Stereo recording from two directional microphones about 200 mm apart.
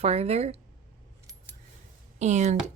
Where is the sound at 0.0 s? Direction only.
30° right (ahead or behind).